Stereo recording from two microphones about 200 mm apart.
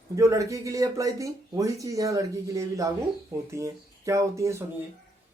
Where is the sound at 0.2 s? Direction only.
15° right (ahead or behind).